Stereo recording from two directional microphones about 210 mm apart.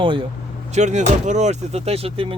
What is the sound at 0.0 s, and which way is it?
Speech, 25° right (ahead or behind).